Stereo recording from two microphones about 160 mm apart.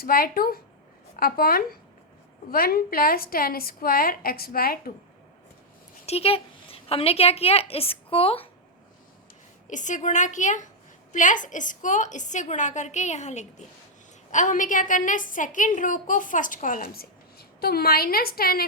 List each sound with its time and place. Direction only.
0.0 s a woman's voice: 65° left (ahead or behind)
6.1 s a woman's voice: 40° left (ahead or behind)
9.6 s a woman's voice: 50° left (ahead or behind); by 18.6 s 70° left (ahead or behind)